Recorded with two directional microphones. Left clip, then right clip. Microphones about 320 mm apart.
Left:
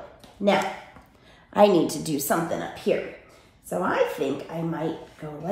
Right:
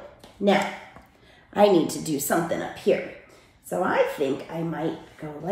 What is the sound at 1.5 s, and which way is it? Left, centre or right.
A woman's voice, centre.